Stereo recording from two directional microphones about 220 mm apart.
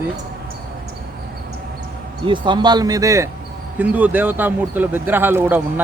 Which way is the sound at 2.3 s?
20° right (ahead or behind).